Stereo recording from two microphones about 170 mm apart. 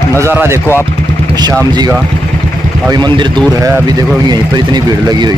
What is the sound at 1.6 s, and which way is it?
Speech, 20° right (ahead or behind).